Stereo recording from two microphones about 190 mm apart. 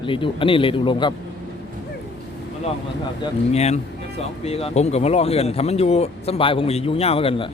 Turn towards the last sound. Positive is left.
turn(degrees=30)  # may be behind; listen again after turning